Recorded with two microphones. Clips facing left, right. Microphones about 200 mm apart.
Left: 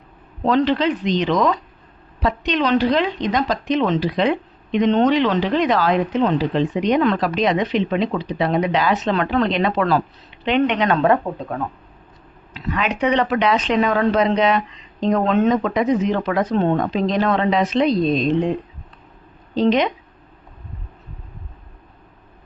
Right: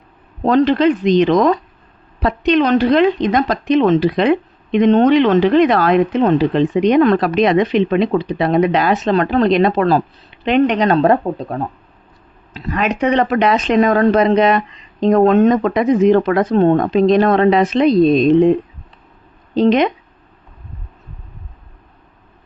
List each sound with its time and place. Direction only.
0.4 s speech: 50° right (ahead or behind)
19.5 s speech: 55° right (ahead or behind)